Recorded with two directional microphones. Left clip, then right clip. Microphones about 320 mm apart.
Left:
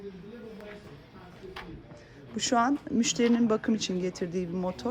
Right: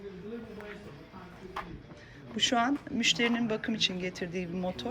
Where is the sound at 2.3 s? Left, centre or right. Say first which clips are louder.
Left 2 dB; centre.